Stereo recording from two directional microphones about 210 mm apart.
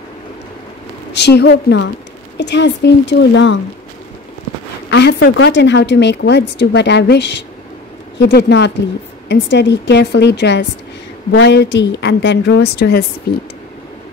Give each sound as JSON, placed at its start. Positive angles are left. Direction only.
{"t": 1.1, "sound": "a woman's voice", "side_deg": 55}
{"t": 4.9, "sound": "a woman's voice", "side_deg": 60}